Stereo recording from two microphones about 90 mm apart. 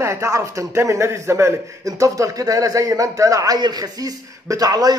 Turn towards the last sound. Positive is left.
turn(degrees=-45)  # may be behind; listen again after turning